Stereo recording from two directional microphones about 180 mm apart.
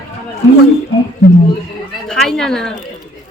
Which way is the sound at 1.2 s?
60° left (ahead or behind).